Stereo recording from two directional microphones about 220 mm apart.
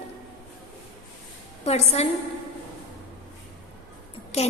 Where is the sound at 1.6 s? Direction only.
30° left (ahead or behind).